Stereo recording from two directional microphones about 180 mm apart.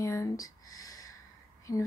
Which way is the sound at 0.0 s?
15° left (ahead or behind).